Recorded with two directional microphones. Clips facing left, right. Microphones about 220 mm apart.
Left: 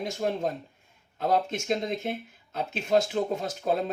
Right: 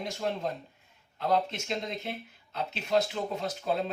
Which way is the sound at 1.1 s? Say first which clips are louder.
Left 2 dB; 50° left (ahead or behind).